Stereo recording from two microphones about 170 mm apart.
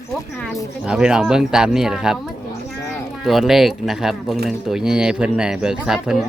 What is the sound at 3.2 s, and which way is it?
Speech, centre (ahead or behind).